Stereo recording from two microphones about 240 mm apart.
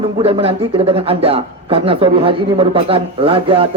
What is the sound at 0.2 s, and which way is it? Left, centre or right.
A man's voice, right.